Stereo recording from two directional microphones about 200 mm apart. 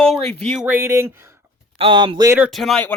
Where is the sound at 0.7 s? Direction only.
10° right (ahead or behind).